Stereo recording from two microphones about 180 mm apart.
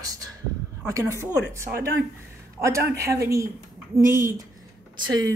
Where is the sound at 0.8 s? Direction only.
15° right (ahead or behind).